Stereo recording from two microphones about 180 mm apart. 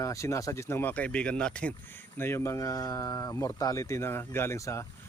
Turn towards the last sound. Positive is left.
turn(degrees=15)  # may be behind; listen again after turning